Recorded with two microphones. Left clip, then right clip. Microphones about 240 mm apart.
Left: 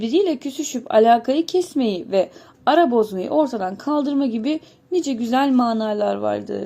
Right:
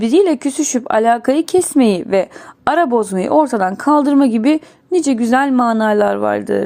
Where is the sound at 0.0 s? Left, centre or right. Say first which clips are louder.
Right 7 dB; right.